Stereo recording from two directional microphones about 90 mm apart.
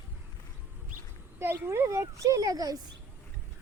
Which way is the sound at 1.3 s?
25° right (ahead or behind).